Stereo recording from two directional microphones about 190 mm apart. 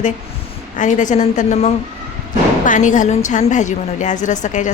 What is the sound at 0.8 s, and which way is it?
A woman's voice, 40° left (ahead or behind).